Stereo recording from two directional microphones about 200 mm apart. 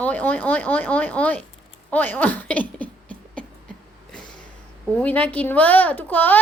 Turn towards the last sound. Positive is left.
turn(degrees=10)  # may be behind; listen again after turning